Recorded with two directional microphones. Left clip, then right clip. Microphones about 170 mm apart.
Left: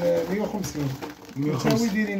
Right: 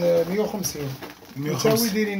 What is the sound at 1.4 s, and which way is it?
Speech, 5° left (ahead or behind).